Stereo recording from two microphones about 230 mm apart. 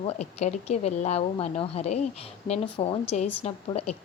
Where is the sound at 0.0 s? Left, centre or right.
Left.